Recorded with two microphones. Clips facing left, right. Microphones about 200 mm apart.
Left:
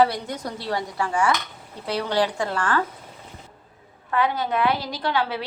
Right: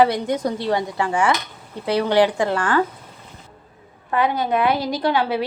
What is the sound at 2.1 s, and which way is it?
Speech, 90° right.